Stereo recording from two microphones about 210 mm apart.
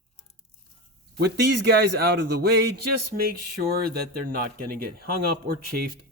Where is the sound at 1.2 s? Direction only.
50° right (ahead or behind).